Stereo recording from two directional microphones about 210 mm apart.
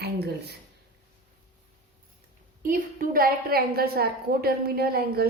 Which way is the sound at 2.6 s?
40° right (ahead or behind).